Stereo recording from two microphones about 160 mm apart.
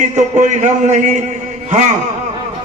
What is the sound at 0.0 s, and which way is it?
Speech, 50° right (ahead or behind).